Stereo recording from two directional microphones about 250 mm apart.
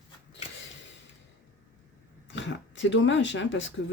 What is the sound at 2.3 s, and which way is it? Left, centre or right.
Speech, left.